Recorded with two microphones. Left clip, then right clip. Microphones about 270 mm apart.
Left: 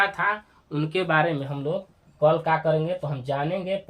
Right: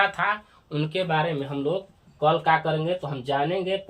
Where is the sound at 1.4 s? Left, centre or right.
Left.